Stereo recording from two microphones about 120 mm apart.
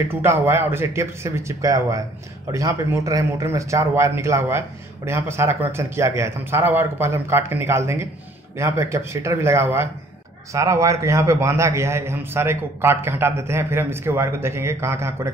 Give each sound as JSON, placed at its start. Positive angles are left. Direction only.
{"t": 0.1, "sound": "a man's voice", "side_deg": -20}